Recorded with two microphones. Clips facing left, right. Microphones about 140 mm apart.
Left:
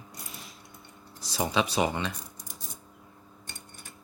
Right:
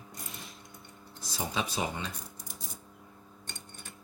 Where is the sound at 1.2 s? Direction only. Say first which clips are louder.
Left 6 dB; 75° left (ahead or behind).